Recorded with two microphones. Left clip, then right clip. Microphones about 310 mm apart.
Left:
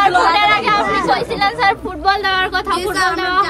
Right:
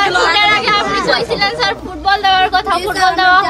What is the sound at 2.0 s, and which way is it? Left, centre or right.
Speech, centre.